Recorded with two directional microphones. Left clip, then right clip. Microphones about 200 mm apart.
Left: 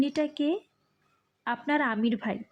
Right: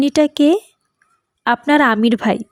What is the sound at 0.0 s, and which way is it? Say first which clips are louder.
A woman's voice: right 14 dB; 50° right (ahead or behind).